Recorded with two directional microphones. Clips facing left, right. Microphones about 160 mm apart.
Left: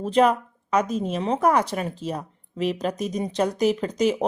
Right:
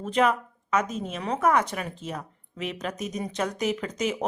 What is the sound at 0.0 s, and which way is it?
A woman's voice, 35° left (ahead or behind).